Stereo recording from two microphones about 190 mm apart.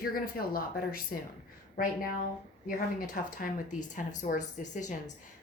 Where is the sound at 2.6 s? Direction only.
45° left (ahead or behind).